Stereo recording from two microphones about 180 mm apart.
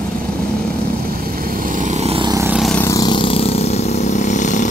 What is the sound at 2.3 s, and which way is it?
Vehicle, 15° right (ahead or behind).